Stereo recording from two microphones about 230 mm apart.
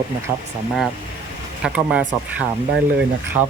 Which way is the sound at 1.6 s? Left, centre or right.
Centre.